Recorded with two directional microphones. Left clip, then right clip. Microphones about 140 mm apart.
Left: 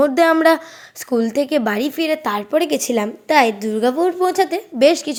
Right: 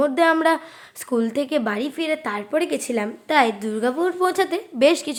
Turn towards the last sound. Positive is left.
turn(degrees=15)  # may be behind; listen again after turning